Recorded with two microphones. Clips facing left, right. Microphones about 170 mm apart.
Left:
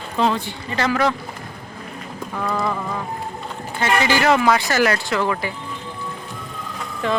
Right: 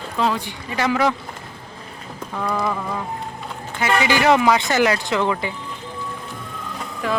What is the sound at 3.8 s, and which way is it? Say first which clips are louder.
Speech: even; 15° right (ahead or behind).